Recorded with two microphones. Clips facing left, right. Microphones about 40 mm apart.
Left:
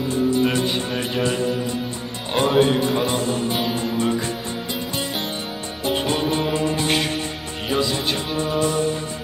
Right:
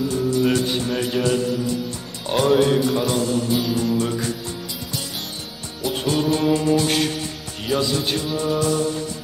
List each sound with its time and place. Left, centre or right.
0.1 s music: left
1.2 s speech: left
5.9 s music: left
7.7 s speech: left